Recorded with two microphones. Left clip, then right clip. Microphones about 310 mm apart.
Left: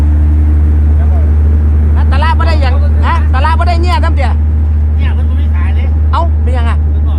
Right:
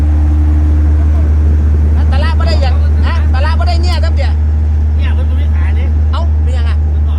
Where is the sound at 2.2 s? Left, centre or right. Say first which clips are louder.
Left 5 dB; left.